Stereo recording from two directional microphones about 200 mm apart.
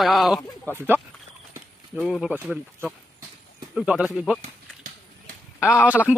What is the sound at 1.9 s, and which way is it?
Speech, centre (ahead or behind).